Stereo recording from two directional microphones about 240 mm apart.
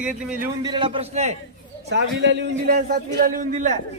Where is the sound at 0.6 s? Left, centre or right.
Centre.